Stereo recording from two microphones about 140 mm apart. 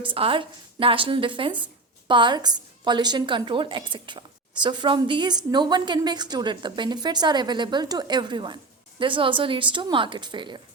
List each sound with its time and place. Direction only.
0.1 s a woman's voice: 40° right (ahead or behind)